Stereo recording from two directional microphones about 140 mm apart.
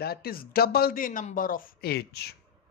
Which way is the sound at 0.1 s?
90° left.